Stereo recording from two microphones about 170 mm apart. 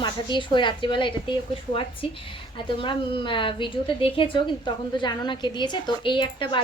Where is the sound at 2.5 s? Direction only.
30° left (ahead or behind).